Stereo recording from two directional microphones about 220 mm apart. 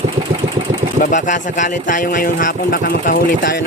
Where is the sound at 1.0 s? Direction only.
35° left (ahead or behind).